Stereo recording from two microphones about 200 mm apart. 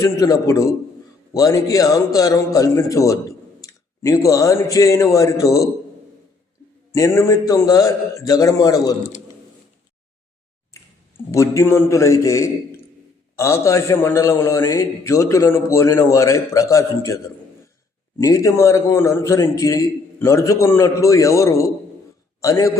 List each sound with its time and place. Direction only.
0.0 s a man's voice: 15° left (ahead or behind)
6.9 s a man's voice: 15° left (ahead or behind)
11.3 s a man's voice: 15° left (ahead or behind)